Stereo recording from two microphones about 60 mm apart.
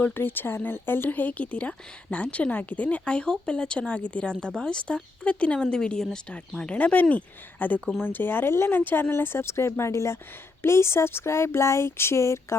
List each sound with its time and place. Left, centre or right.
0.0 s speech: left